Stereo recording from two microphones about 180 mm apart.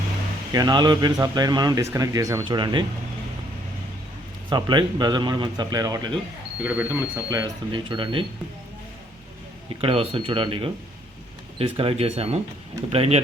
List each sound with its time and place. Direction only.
0.5 s speech: 20° right (ahead or behind)
4.4 s speech: 25° right (ahead or behind)
6.6 s speech: 10° right (ahead or behind)
7.3 s speech: 20° right (ahead or behind)
9.8 s speech: 35° right (ahead or behind)